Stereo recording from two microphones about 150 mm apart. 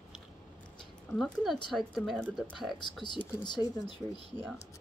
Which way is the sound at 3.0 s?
30° left (ahead or behind).